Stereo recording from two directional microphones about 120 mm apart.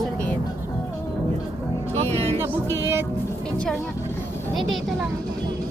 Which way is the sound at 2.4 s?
20° right (ahead or behind).